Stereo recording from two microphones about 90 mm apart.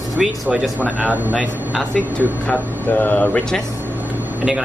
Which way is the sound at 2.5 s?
15° left (ahead or behind).